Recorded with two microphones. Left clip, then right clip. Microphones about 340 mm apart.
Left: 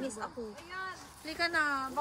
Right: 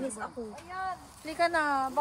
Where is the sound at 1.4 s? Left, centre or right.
Centre.